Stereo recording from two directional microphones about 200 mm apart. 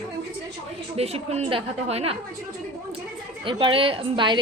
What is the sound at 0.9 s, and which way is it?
A woman's voice, 30° right (ahead or behind).